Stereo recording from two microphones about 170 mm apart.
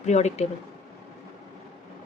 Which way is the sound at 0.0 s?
45° left (ahead or behind).